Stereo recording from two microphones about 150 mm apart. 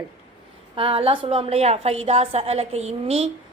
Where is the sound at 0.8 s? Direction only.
40° right (ahead or behind).